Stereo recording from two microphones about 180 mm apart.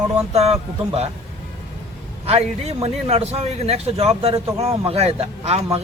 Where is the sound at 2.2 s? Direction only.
35° right (ahead or behind).